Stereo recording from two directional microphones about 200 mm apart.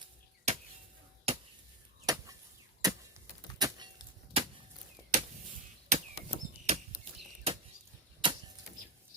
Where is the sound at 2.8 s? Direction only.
20° right (ahead or behind).